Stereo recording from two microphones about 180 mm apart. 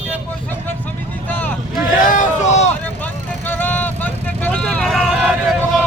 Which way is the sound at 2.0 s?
45° left (ahead or behind).